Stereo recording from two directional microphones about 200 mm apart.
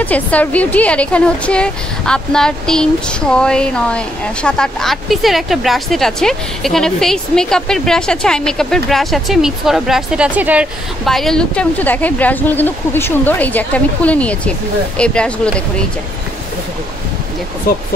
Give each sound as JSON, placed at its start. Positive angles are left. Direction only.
{"t": 0.0, "sound": "a woman's voice", "side_deg": 5}
{"t": 17.7, "sound": "speech", "side_deg": 45}